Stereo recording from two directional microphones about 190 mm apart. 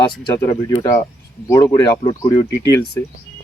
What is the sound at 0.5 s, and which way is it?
Speech, 25° left (ahead or behind).